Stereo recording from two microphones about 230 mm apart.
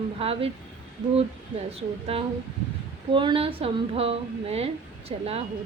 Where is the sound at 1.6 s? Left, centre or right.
Right.